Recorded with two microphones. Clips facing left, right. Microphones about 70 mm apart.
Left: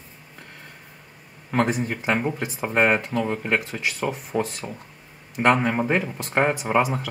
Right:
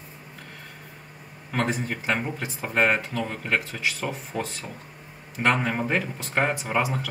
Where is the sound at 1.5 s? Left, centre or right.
Centre.